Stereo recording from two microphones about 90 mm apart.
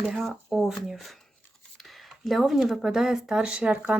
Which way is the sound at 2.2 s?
Centre (ahead or behind).